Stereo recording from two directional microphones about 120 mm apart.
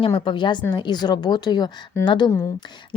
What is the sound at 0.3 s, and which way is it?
A woman's voice, 40° left (ahead or behind).